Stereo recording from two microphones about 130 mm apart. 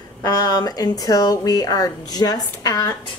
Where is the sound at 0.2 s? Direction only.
30° left (ahead or behind).